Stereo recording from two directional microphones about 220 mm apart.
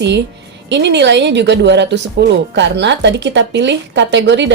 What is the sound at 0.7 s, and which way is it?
Speech, 50° right (ahead or behind).